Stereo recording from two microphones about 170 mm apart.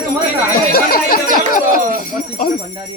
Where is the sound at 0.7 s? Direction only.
60° left (ahead or behind).